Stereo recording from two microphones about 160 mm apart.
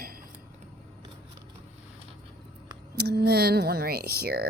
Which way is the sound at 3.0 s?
90° right.